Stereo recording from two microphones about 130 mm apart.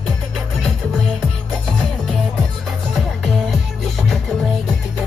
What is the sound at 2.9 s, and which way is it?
Music, 5° right (ahead or behind).